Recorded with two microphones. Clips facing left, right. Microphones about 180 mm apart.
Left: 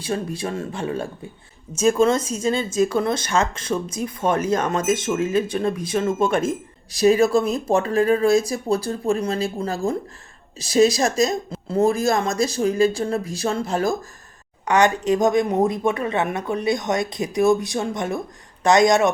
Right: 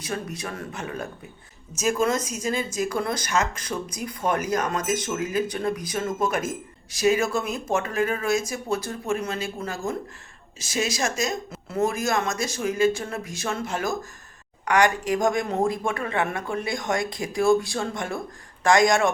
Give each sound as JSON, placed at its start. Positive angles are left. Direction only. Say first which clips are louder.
{"t": 0.0, "sound": "speech", "louder": "left 6 dB", "side_deg": 30}
{"t": 14.6, "sound": "speech", "louder": "left 3 dB", "side_deg": 20}